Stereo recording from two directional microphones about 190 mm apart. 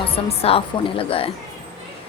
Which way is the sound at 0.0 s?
30° left (ahead or behind).